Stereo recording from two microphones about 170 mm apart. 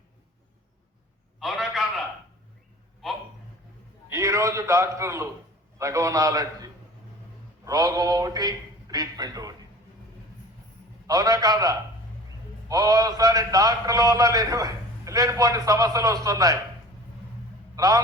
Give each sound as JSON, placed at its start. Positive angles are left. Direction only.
{"t": 1.4, "sound": "a sound", "side_deg": 0}
{"t": 4.1, "sound": "a man's voice", "side_deg": -20}
{"t": 11.0, "sound": "a man's voice", "side_deg": -20}
{"t": 17.7, "sound": "a man's voice", "side_deg": -20}